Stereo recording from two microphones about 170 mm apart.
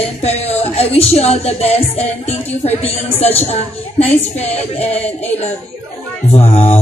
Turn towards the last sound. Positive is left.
turn(degrees=35)  # may be behind; listen again after turning